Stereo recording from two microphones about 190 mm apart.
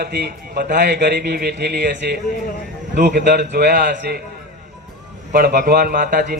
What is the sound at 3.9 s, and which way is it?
Speech, 65° right (ahead or behind).